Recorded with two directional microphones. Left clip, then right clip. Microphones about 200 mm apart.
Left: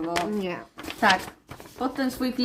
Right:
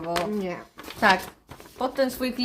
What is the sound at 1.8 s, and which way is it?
Speech, 45° right (ahead or behind).